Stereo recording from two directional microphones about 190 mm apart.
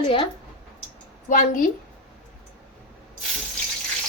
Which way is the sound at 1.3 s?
45° left (ahead or behind).